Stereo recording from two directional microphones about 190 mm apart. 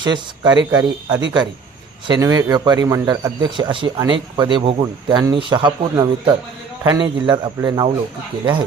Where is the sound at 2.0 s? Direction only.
20° right (ahead or behind).